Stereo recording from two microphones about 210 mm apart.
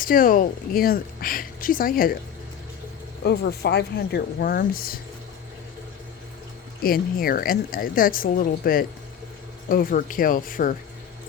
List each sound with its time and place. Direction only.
0.0 s speech: 40° left (ahead or behind)
3.2 s speech: 50° left (ahead or behind)
6.8 s speech: 45° left (ahead or behind)